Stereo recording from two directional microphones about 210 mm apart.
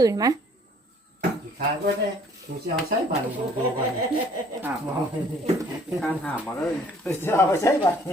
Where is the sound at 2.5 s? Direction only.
45° right (ahead or behind).